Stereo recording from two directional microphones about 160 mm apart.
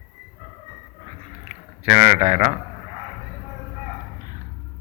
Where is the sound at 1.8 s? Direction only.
45° right (ahead or behind).